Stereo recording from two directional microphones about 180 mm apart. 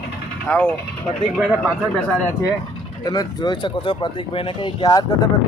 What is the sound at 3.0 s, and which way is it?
Speech, 20° left (ahead or behind).